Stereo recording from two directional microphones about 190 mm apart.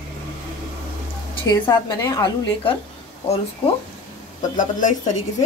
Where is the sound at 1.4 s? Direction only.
15° left (ahead or behind).